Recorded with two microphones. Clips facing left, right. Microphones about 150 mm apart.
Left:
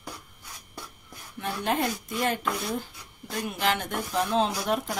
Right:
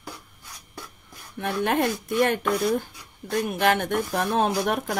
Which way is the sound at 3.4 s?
55° right (ahead or behind).